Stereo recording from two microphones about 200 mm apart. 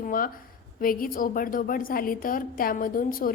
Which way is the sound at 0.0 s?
45° left (ahead or behind).